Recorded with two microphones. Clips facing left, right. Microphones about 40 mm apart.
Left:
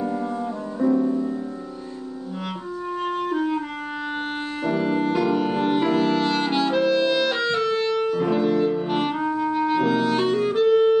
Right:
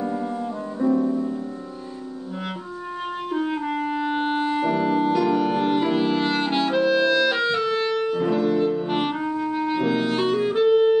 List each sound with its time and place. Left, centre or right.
0.7 s music: centre
3.0 s clarinet: centre
4.9 s music: centre
5.9 s clarinet: centre
8.3 s music: centre
8.8 s clarinet: centre